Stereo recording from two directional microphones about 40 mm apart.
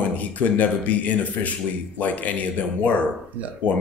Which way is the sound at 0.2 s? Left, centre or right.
Left.